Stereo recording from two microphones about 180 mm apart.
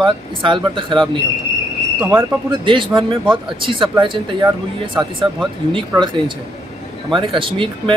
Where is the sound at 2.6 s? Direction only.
25° right (ahead or behind).